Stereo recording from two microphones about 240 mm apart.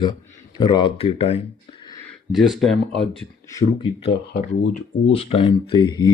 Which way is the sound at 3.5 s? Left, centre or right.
Centre.